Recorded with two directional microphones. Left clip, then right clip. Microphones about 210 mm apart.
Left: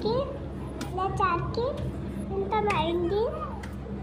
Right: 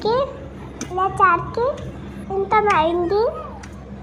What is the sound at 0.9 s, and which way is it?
A child's voice, 15° right (ahead or behind).